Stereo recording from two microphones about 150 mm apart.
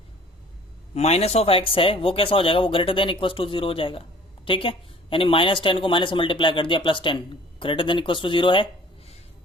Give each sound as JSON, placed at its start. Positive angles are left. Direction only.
{"t": 0.9, "sound": "speech", "side_deg": 45}